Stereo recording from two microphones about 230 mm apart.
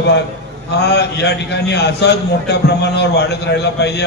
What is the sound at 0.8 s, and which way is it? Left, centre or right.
A man's voice, left.